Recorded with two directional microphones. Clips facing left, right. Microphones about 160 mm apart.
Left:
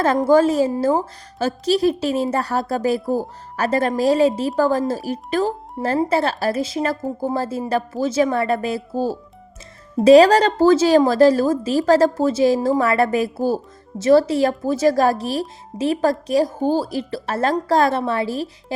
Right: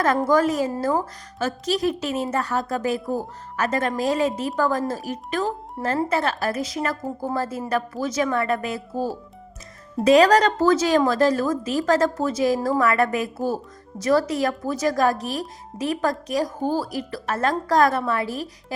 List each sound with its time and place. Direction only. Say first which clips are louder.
0.3 s a woman's voice: left 5 dB; 30° left (ahead or behind)